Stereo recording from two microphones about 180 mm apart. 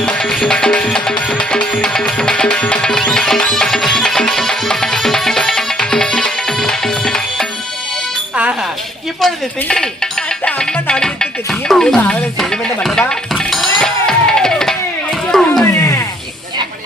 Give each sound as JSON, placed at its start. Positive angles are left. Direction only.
{"t": 0.0, "sound": "music", "side_deg": 5}
{"t": 9.2, "sound": "music", "side_deg": 5}
{"t": 15.8, "sound": "a sound", "side_deg": 15}